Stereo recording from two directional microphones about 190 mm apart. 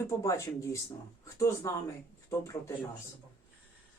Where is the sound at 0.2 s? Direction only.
15° left (ahead or behind).